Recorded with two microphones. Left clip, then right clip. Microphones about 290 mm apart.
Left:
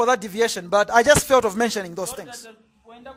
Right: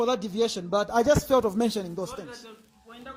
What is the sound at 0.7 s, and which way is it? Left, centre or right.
Speech, left.